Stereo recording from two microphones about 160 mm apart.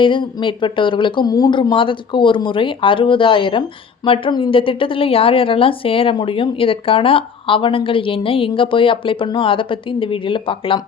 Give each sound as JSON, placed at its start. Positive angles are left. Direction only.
{"t": 0.0, "sound": "a woman's voice", "side_deg": 30}